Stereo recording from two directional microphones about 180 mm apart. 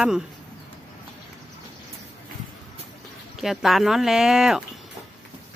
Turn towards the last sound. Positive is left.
turn(degrees=0)  # may be behind; listen again after turning